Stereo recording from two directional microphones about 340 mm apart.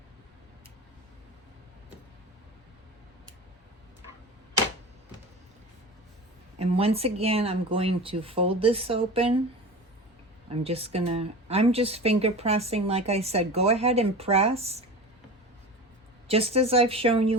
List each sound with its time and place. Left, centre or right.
6.6 s speech: centre
10.6 s speech: centre
16.3 s speech: centre